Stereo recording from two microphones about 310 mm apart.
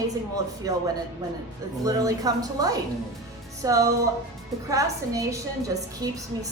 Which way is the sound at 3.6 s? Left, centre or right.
Centre.